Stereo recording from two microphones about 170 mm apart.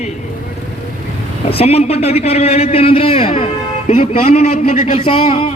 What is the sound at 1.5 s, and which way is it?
A man's voice, 35° left (ahead or behind).